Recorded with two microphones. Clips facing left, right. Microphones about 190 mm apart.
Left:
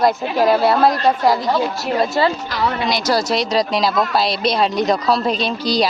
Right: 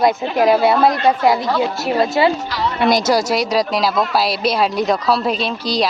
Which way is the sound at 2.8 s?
50° right (ahead or behind).